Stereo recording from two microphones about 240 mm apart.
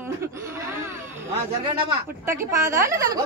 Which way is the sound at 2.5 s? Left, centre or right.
Centre.